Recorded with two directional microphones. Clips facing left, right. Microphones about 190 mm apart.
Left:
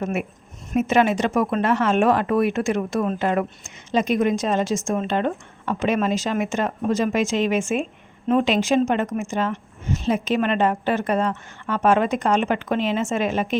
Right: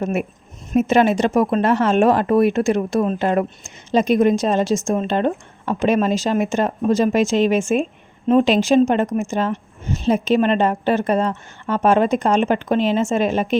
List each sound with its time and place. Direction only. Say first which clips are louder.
0.0 s a woman's voice: right 4 dB; 35° right (ahead or behind)